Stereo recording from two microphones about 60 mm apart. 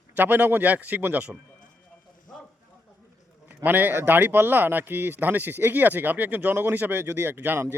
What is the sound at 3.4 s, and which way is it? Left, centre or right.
A man's voice, right.